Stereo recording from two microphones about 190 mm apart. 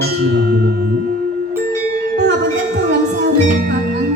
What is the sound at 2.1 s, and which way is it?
Music, 65° right (ahead or behind).